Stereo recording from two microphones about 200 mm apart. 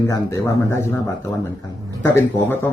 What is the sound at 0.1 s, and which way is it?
Speech, 15° left (ahead or behind).